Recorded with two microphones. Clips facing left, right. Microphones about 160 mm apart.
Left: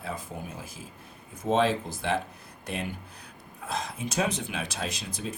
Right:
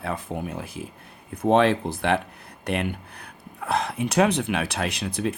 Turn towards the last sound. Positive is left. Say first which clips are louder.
# right 8 dB
turn(degrees=-65)  # may be behind; listen again after turning